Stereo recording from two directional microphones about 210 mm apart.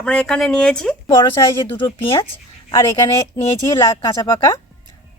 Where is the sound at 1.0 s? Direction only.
20° left (ahead or behind).